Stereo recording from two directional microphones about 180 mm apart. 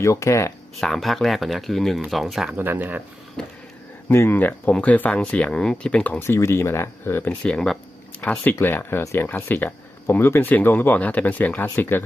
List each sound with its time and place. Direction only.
0.0 s speech: 15° left (ahead or behind)
0.8 s speech: centre (ahead or behind)
3.4 s a sound: 5° left (ahead or behind)
4.1 s speech: 15° left (ahead or behind)